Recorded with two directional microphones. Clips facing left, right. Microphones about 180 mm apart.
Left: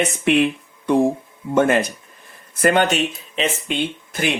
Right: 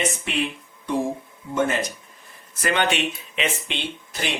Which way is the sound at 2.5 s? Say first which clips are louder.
Left 6 dB; 50° left (ahead or behind).